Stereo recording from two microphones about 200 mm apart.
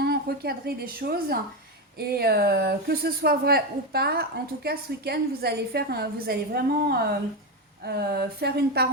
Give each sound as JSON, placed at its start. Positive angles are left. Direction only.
{"t": 0.0, "sound": "a woman's voice", "side_deg": -50}